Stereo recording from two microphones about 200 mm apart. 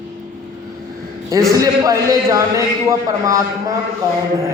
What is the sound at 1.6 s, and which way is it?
A man's voice, 15° right (ahead or behind).